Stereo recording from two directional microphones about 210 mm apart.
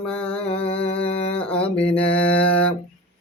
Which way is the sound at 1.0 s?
5° left (ahead or behind).